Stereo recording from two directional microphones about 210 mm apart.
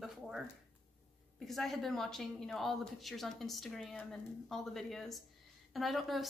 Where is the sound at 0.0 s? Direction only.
Centre (ahead or behind).